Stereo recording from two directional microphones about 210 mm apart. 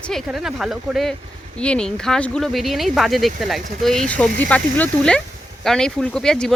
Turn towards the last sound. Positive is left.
turn(degrees=5)  # may be behind; listen again after turning